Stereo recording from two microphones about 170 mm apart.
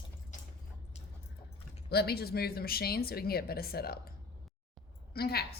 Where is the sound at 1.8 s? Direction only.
70° left (ahead or behind).